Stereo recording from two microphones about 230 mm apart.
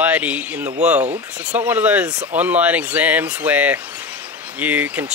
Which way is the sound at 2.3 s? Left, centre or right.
Centre.